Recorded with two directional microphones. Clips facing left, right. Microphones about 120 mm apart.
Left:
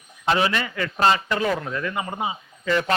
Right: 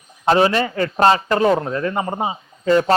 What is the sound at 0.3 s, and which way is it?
Speech, 35° right (ahead or behind).